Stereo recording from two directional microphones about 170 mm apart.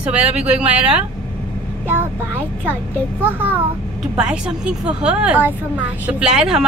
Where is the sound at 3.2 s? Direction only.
10° right (ahead or behind).